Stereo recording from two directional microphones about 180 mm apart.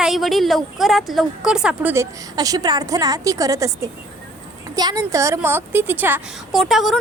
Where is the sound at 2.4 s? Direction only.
20° right (ahead or behind).